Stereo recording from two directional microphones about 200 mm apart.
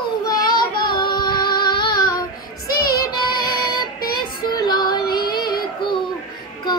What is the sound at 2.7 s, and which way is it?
Child singing, 50° left (ahead or behind).